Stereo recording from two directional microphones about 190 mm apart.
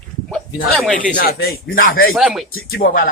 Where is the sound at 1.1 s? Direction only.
50° left (ahead or behind).